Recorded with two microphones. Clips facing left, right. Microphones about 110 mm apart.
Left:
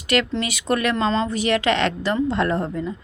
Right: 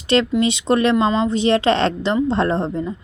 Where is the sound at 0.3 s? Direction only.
20° right (ahead or behind).